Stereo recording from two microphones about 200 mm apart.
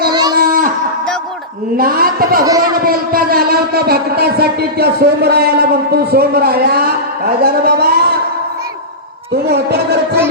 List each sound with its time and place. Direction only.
0.1 s a sound: 20° right (ahead or behind)
0.3 s a sound: 45° right (ahead or behind)
1.7 s a man's voice: 45° right (ahead or behind)
2.4 s speech: 20° right (ahead or behind)
2.8 s a man's voice: 45° right (ahead or behind)
9.5 s a man's voice: 55° right (ahead or behind)